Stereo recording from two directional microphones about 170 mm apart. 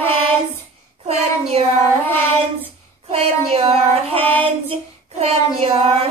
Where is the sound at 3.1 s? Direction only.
35° right (ahead or behind).